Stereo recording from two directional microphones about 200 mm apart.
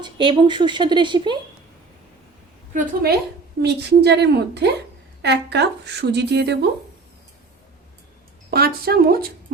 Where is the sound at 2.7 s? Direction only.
45° right (ahead or behind).